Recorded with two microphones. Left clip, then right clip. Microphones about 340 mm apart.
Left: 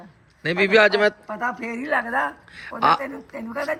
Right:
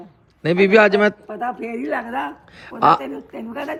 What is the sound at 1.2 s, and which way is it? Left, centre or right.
Speech, left.